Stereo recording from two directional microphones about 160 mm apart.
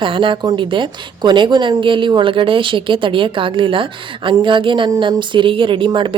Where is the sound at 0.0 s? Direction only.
30° right (ahead or behind).